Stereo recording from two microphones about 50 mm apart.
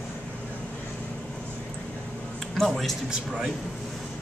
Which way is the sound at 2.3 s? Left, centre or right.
Centre.